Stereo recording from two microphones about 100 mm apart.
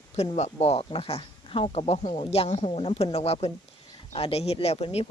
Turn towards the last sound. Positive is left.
turn(degrees=90)